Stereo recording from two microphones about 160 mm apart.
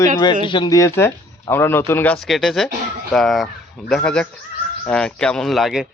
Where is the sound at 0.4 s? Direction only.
30° left (ahead or behind).